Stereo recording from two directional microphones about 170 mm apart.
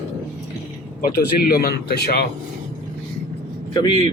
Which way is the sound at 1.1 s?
60° left (ahead or behind).